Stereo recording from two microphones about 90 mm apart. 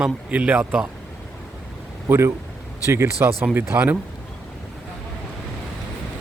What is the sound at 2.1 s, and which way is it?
Speech, 20° right (ahead or behind).